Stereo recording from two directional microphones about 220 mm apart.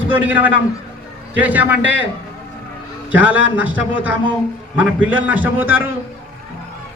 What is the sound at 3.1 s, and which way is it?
Speech, 5° right (ahead or behind).